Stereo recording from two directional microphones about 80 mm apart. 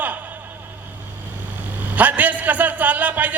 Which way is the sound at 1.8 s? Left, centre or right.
Centre.